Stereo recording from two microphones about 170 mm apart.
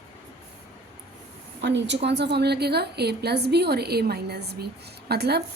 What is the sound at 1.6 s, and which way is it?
A woman's voice, 90° right.